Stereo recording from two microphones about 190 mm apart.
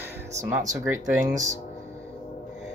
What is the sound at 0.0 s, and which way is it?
Music, 10° right (ahead or behind).